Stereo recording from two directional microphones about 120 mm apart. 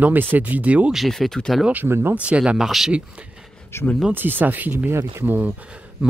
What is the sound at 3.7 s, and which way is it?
Speech, 20° left (ahead or behind).